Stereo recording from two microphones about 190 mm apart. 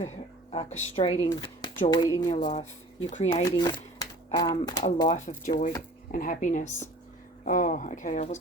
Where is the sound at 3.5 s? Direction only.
20° left (ahead or behind).